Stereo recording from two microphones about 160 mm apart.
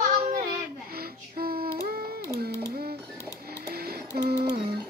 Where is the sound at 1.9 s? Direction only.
70° right (ahead or behind).